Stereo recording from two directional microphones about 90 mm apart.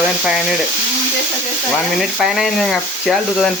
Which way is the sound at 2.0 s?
5° right (ahead or behind).